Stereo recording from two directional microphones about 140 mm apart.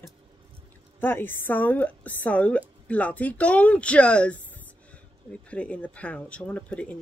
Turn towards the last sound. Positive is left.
turn(degrees=10)  # may be behind; listen again after turning